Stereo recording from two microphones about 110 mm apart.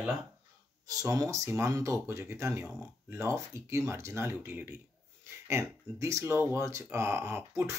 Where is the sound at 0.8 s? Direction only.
30° right (ahead or behind).